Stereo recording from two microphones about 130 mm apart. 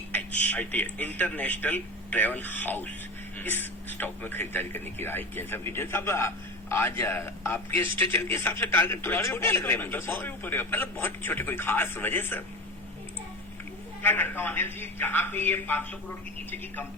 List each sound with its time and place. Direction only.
0.1 s a man's voice: 15° left (ahead or behind)
14.0 s a man's voice: 15° left (ahead or behind)